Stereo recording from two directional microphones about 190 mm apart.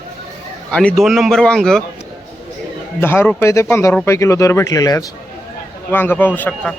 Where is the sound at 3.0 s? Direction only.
10° left (ahead or behind).